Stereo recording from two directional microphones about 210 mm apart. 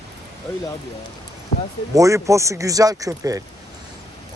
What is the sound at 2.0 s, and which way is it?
Speech, 15° right (ahead or behind).